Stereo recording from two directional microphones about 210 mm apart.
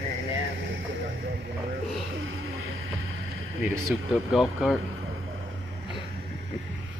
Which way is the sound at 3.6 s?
5° right (ahead or behind).